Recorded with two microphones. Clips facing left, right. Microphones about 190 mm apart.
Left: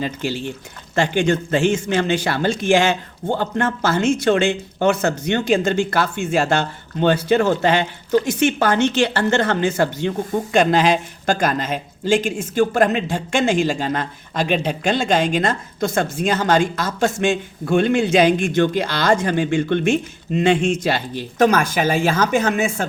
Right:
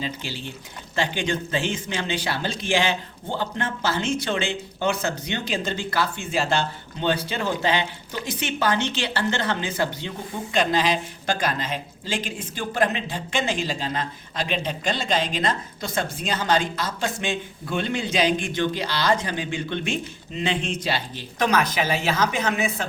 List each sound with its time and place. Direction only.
0.0 s speech: 50° left (ahead or behind)